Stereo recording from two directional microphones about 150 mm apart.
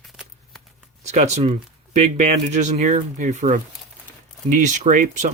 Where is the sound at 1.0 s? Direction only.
45° right (ahead or behind).